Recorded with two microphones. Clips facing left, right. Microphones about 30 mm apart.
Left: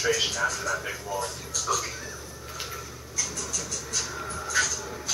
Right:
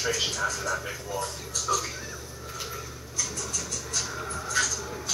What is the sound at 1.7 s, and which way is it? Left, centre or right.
Speech, centre.